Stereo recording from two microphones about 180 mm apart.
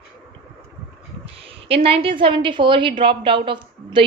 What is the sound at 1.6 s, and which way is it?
A woman's voice, 30° right (ahead or behind).